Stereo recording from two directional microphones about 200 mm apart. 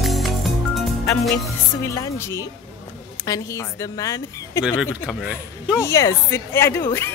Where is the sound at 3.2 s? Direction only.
15° left (ahead or behind).